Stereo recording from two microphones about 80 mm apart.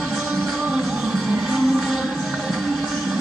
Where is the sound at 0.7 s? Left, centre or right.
Centre.